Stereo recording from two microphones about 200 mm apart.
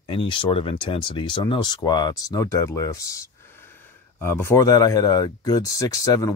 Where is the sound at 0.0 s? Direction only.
25° left (ahead or behind).